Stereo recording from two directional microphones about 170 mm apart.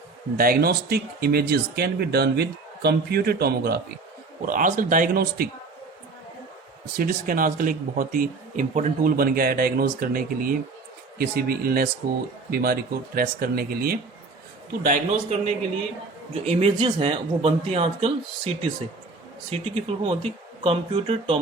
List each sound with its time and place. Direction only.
0.3 s speech: 60° right (ahead or behind)
4.4 s speech: 50° right (ahead or behind)
6.9 s speech: 55° right (ahead or behind)
14.8 s speech: 40° right (ahead or behind)